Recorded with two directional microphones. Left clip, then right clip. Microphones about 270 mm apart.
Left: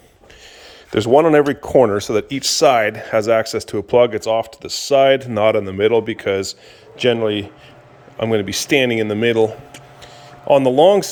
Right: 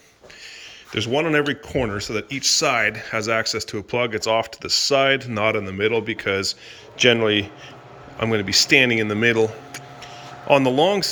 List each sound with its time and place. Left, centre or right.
1.1 s speech: centre